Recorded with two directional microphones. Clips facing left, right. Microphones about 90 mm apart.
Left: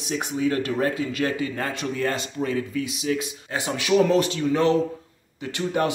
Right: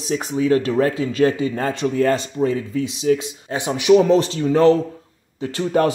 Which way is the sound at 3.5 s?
20° right (ahead or behind).